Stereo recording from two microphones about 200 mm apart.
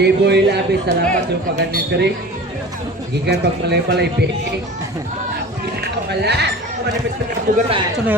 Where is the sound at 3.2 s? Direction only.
55° right (ahead or behind).